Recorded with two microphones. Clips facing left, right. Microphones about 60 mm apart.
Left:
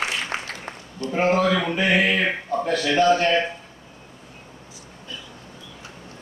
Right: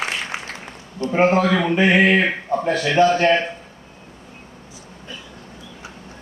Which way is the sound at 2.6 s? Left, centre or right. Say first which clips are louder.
Right 3 dB; right.